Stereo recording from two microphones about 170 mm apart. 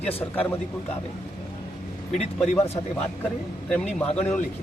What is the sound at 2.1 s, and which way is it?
Speech, 40° left (ahead or behind).